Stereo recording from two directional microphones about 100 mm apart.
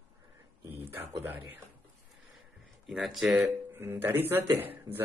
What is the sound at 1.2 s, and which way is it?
Speech, 20° right (ahead or behind).